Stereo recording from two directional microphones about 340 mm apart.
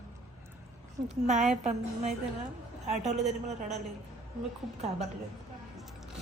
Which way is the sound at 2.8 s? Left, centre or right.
Centre.